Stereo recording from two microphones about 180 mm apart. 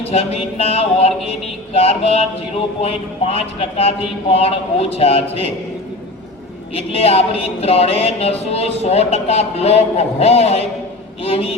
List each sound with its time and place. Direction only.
0.1 s a woman's voice: 35° left (ahead or behind)
6.7 s a woman's voice: 35° left (ahead or behind)